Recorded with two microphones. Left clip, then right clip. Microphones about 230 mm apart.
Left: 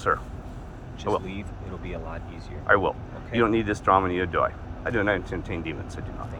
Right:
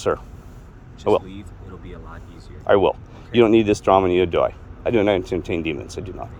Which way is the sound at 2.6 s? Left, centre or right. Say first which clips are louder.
Right 5 dB; right.